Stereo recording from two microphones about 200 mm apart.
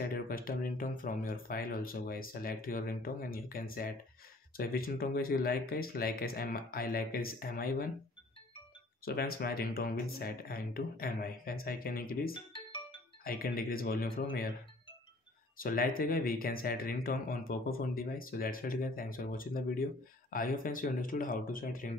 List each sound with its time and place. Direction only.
0.0 s speech: 45° left (ahead or behind)
9.0 s speech: 50° left (ahead or behind)
12.5 s music: 25° left (ahead or behind)
13.2 s speech: 45° left (ahead or behind)
15.5 s speech: 45° left (ahead or behind)